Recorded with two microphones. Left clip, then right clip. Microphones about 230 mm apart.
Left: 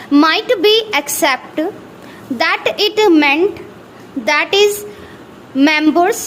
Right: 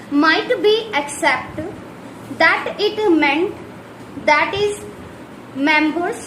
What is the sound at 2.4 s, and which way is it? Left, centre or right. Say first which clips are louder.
A woman's voice: left 1 dB; left.